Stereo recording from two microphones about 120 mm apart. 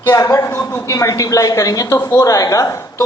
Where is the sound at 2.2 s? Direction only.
30° left (ahead or behind).